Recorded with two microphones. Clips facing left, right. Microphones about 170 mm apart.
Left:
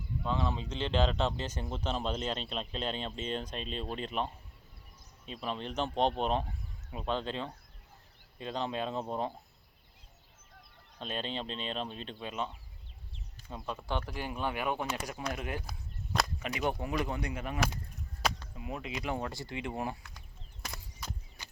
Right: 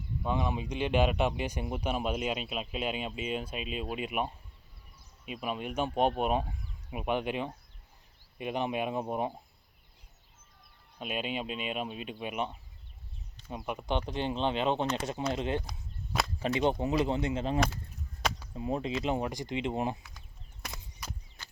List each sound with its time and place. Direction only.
0.2 s speech: 15° right (ahead or behind)
11.0 s speech: 10° right (ahead or behind)
13.5 s speech: 15° right (ahead or behind)
16.1 s whip: 5° right (ahead or behind)
16.6 s speech: 20° right (ahead or behind)
18.2 s a sound: 5° right (ahead or behind)
18.5 s speech: 30° right (ahead or behind)
19.0 s speech: 20° right (ahead or behind)
20.6 s a sound: centre (ahead or behind)